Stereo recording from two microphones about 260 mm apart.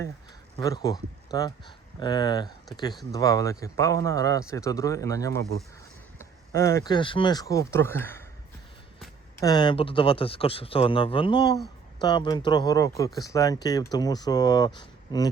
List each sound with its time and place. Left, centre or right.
0.6 s speech: centre
9.4 s speech: centre